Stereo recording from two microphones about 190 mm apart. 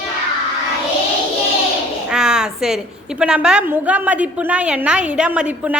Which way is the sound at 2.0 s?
5° right (ahead or behind).